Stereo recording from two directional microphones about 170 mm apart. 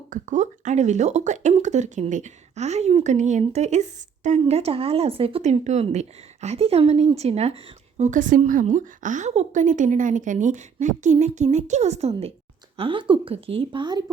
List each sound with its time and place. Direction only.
0.1 s a woman's voice: 45° right (ahead or behind); by 14.0 s 25° right (ahead or behind)